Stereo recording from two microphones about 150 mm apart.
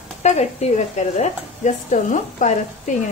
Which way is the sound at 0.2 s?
50° left (ahead or behind).